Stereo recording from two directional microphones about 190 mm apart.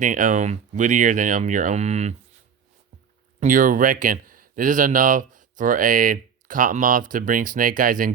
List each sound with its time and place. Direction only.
0.0 s speech: 45° right (ahead or behind)
3.4 s speech: 45° right (ahead or behind)